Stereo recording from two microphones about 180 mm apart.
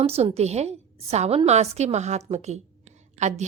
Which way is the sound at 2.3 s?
40° right (ahead or behind).